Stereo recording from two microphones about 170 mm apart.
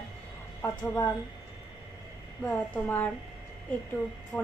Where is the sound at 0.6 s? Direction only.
15° left (ahead or behind).